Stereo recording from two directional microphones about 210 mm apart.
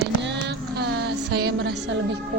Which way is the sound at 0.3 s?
55° right (ahead or behind).